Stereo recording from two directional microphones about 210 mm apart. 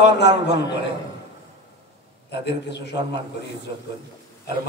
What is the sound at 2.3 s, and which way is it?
Speech, 55° left (ahead or behind).